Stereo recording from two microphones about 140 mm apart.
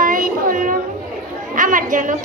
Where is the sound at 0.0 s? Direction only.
75° right (ahead or behind).